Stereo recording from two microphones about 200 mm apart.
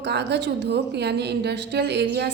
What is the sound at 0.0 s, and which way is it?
A woman's voice, 60° right (ahead or behind).